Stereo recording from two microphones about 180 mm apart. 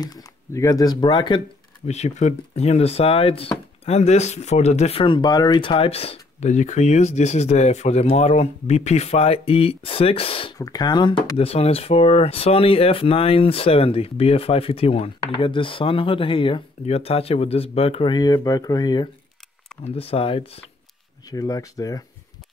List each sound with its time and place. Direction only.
0.0 s speech: 20° left (ahead or behind)
1.9 s speech: 40° left (ahead or behind); by 19.0 s 20° left (ahead or behind)
19.8 s speech: 35° left (ahead or behind)
21.3 s speech: 20° left (ahead or behind)